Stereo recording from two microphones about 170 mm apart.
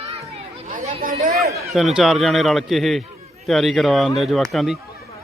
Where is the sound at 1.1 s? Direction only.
45° right (ahead or behind).